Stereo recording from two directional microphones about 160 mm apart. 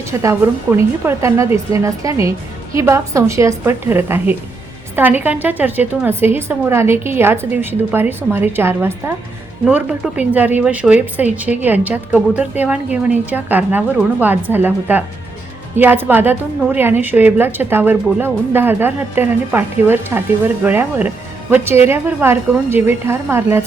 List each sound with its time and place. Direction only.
0.1 s a woman's voice: 20° right (ahead or behind)